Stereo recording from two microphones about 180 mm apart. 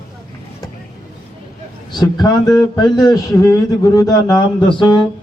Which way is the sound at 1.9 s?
25° left (ahead or behind).